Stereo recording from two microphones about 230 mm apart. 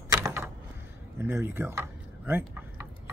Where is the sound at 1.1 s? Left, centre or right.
Centre.